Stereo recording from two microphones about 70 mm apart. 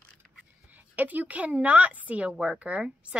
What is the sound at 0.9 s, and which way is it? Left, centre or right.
Speech, right.